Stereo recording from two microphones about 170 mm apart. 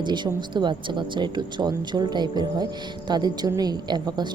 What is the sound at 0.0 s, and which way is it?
Speech, 25° right (ahead or behind).